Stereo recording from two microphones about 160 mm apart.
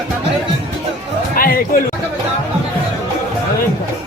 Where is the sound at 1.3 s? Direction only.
65° left (ahead or behind).